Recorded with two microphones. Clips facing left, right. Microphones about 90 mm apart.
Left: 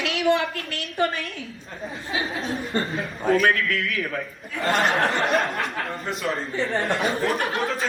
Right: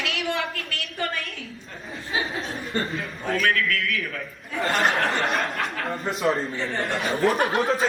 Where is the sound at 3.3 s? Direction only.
35° left (ahead or behind).